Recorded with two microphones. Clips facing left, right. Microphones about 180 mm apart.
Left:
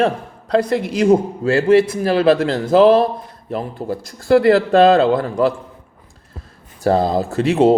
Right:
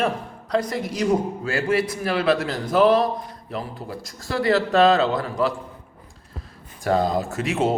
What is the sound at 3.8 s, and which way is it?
Speech, 50° left (ahead or behind).